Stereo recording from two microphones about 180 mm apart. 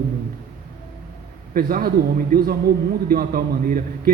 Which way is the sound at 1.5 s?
55° right (ahead or behind).